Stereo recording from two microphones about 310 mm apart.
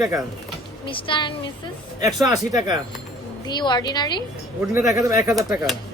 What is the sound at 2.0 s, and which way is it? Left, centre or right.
Speech, centre.